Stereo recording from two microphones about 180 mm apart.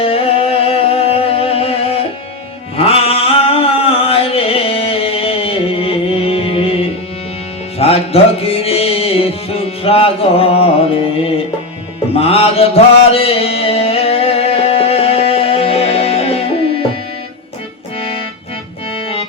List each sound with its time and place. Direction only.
0.0 s music: 30° left (ahead or behind)
2.7 s chant: 30° left (ahead or behind)
7.8 s music: 35° left (ahead or behind)
12.1 s mantra: 35° left (ahead or behind)